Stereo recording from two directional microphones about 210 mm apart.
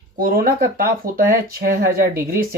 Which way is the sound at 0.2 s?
45° right (ahead or behind).